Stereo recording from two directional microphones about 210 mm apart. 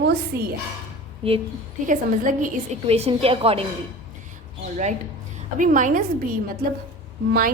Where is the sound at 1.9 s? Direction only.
40° right (ahead or behind).